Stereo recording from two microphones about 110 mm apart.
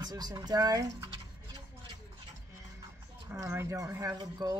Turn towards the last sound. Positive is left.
turn(degrees=-40)  # may be behind; listen again after turning